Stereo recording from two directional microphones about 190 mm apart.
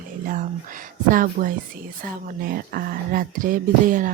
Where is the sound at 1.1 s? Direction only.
45° right (ahead or behind).